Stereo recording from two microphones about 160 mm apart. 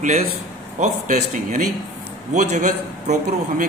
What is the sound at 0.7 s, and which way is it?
A man's voice, 50° right (ahead or behind).